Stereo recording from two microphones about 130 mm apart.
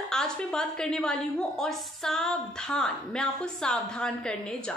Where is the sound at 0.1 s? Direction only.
5° left (ahead or behind).